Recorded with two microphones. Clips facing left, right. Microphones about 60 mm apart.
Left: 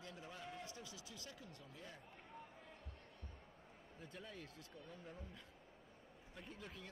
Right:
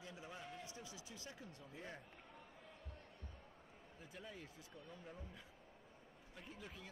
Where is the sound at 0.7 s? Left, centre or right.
Right.